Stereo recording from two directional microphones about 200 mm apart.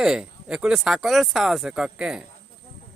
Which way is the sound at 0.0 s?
5° right (ahead or behind).